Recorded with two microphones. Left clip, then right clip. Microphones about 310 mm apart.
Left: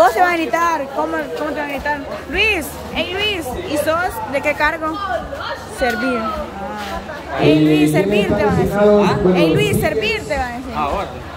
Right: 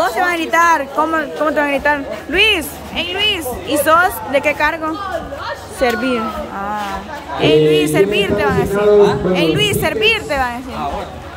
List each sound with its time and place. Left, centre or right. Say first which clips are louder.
0.0 s a woman's voice: left 3 dB; centre
7.4 s a woman's voice: right 2 dB; centre